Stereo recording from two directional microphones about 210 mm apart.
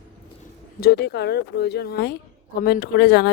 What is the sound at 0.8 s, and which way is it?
Speech, 50° left (ahead or behind).